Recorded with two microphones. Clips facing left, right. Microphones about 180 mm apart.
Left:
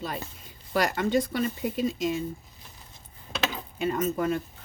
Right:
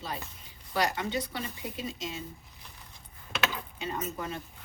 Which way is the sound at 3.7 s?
50° left (ahead or behind).